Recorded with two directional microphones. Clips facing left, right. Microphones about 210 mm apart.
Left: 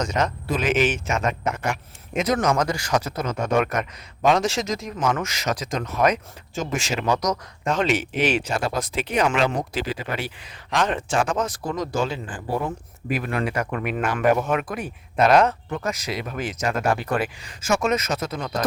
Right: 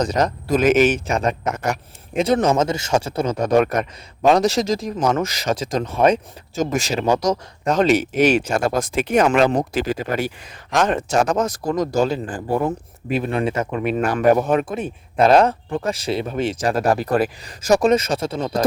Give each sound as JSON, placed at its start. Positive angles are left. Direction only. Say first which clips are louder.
{"t": 0.0, "sound": "speech", "louder": "right 4 dB", "side_deg": -35}
{"t": 13.1, "sound": "speech", "louder": "right 4 dB", "side_deg": -25}